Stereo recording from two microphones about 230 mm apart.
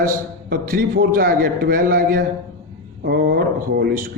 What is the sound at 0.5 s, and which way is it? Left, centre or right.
A man's voice, right.